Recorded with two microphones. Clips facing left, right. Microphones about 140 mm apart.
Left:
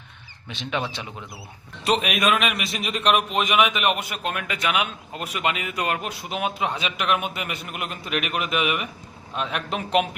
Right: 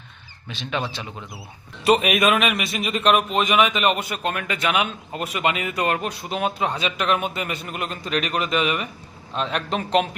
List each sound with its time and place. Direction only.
0.4 s speech: 20° left (ahead or behind)
1.8 s a man's voice: centre (ahead or behind)